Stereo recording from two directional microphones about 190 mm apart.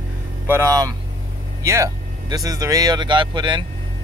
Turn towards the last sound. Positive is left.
turn(degrees=-25)  # may be behind; listen again after turning